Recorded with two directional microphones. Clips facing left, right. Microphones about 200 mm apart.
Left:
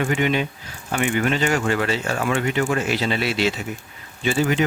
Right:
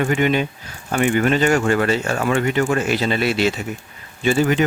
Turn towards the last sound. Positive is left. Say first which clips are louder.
# right 3 dB
turn(degrees=-50)  # may be behind; listen again after turning